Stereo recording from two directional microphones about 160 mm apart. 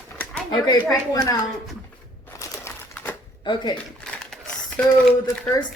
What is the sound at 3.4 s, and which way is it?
Speech, 30° left (ahead or behind).